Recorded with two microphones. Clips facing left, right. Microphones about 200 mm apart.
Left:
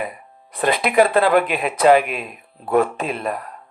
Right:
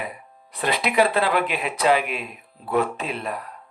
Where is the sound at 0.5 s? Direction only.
50° left (ahead or behind).